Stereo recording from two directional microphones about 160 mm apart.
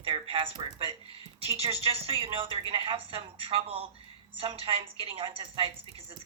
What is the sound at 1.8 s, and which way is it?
Speech, 35° right (ahead or behind).